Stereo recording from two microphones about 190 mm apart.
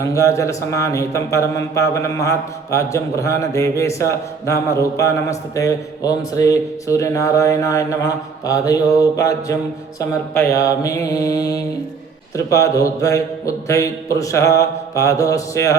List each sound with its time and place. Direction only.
0.0 s a man's voice: 15° left (ahead or behind)
12.4 s a man's voice: 15° left (ahead or behind)